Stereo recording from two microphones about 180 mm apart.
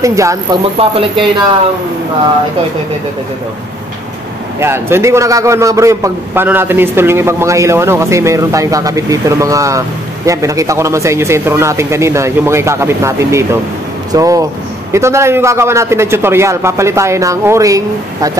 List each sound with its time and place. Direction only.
0.0 s a man's voice: 15° right (ahead or behind)
0.7 s speech: 30° right (ahead or behind)
4.6 s a man's voice: 15° right (ahead or behind)